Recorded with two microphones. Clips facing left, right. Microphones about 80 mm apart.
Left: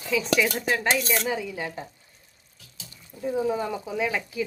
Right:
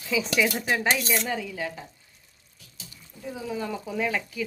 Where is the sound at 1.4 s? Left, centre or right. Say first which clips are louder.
Even; centre.